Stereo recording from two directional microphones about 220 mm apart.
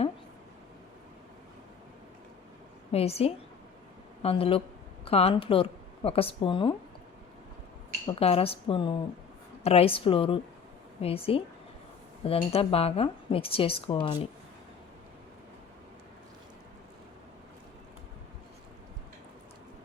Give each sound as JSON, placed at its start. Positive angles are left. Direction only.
{"t": 2.9, "sound": "a woman's voice", "side_deg": 25}
{"t": 8.0, "sound": "speech", "side_deg": 25}